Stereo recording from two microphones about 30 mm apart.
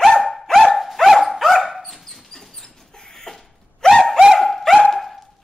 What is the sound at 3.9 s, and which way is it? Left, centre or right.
Bird, centre.